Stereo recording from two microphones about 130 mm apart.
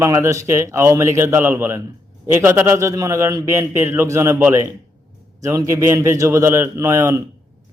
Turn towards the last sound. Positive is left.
turn(degrees=-20)  # may be behind; listen again after turning